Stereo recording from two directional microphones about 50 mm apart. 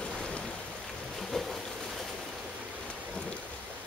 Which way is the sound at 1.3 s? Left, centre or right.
Centre.